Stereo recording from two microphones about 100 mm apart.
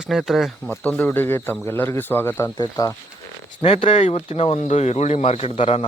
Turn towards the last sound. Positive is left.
turn(degrees=75)  # may be behind; listen again after turning